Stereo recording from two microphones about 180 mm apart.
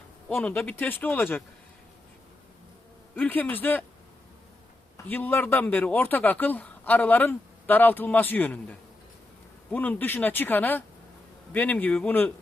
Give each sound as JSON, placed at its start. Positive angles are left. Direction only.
{"t": 0.3, "sound": "speech", "side_deg": 10}
{"t": 3.2, "sound": "speech", "side_deg": 10}
{"t": 5.0, "sound": "speech", "side_deg": 10}
{"t": 9.7, "sound": "speech", "side_deg": 10}